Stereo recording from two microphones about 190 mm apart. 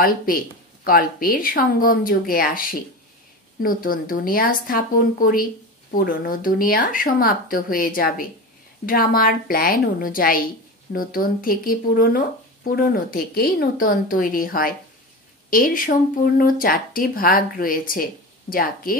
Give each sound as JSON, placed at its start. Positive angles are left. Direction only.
{"t": 0.0, "sound": "speech", "side_deg": 50}